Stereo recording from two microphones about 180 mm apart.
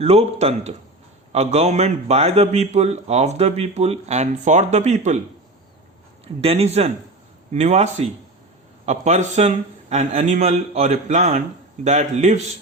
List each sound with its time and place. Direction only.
0.0 s a man's voice: 35° right (ahead or behind)
6.2 s a man's voice: 35° right (ahead or behind)